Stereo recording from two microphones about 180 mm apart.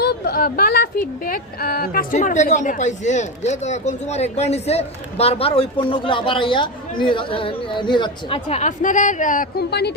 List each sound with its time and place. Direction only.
0.0 s speech: 60° left (ahead or behind)